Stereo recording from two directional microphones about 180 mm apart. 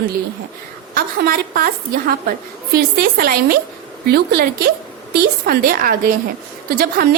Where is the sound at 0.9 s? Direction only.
55° right (ahead or behind).